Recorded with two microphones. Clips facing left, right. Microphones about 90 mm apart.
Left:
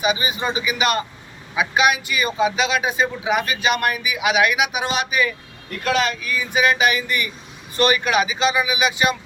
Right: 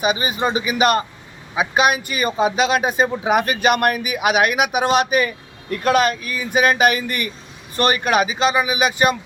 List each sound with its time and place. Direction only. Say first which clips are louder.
0.0 s a man's voice: right 2 dB; 45° right (ahead or behind)